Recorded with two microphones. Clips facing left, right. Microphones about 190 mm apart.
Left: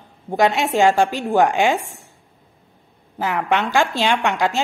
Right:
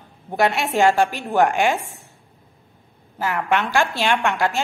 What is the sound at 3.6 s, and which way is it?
Speech, 15° left (ahead or behind).